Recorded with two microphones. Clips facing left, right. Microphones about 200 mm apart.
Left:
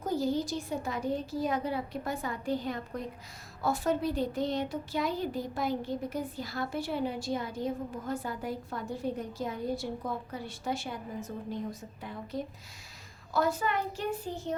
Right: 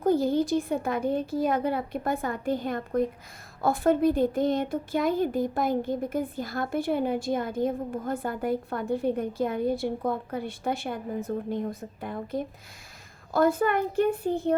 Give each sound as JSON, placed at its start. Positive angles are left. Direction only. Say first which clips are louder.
{"t": 0.0, "sound": "a woman's voice", "louder": "right 7 dB", "side_deg": -55}